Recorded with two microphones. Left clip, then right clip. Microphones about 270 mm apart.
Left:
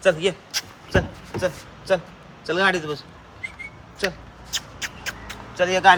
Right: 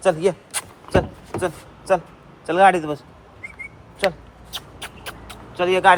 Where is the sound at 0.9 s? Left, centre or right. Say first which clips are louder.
Right 4 dB; centre.